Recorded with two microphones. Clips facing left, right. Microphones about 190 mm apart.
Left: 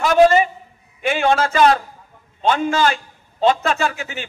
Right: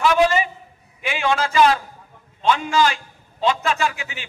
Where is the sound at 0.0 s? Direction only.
45° left (ahead or behind).